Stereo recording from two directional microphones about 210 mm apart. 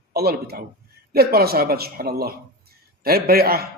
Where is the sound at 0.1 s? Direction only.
50° right (ahead or behind).